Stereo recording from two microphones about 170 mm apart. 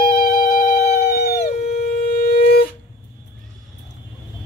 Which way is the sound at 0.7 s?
65° left (ahead or behind).